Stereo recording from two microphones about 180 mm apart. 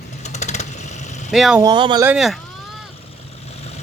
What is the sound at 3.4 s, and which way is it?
Vehicle, 35° left (ahead or behind).